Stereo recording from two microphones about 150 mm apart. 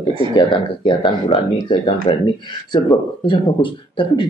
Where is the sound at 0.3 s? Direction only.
30° left (ahead or behind).